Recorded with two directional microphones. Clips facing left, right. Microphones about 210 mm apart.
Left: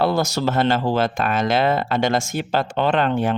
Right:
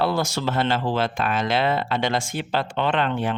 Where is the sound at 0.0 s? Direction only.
40° left (ahead or behind).